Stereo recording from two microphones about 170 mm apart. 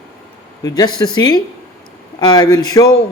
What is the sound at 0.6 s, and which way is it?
A man's voice, 20° left (ahead or behind).